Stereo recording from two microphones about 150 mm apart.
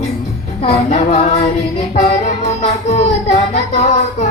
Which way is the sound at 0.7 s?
45° left (ahead or behind).